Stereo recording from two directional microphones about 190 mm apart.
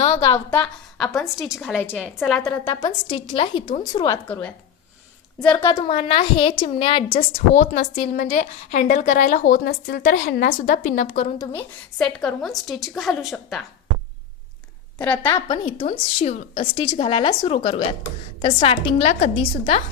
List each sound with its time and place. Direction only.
0.5 s a woman's voice: 5° left (ahead or behind)
2.6 s a woman's voice: 25° left (ahead or behind)
4.3 s a woman's voice: 10° left (ahead or behind)
5.6 s a woman's voice: 25° left (ahead or behind)
11.9 s a woman's voice: centre (ahead or behind)
14.9 s a woman's voice: 10° left (ahead or behind)
15.9 s a woman's voice: 30° left (ahead or behind)